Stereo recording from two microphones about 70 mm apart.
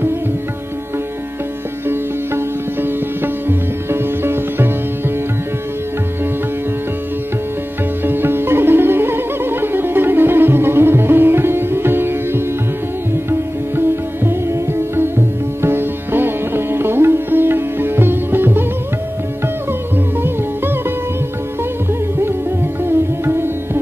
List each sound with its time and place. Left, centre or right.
1.9 s music: right
8.0 s music: right
13.1 s sitar: right
22.8 s music: right